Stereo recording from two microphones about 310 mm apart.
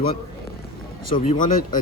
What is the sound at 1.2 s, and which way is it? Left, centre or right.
Speech, left.